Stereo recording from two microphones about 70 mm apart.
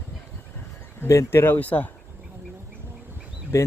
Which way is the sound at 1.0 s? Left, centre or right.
Left.